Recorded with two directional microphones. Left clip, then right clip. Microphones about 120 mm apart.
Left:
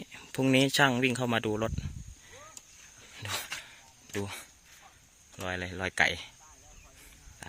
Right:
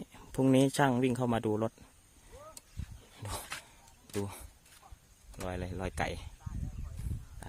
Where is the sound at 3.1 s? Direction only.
25° right (ahead or behind).